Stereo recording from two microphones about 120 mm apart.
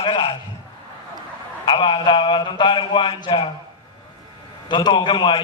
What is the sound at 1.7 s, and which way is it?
A man's voice, 40° left (ahead or behind).